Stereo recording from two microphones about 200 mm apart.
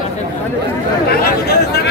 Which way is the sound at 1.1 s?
50° left (ahead or behind).